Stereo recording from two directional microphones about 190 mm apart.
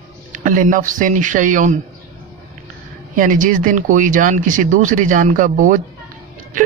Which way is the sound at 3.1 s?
45° right (ahead or behind).